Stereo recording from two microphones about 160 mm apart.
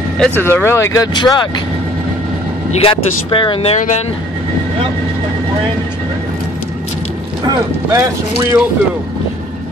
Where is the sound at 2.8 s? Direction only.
35° left (ahead or behind).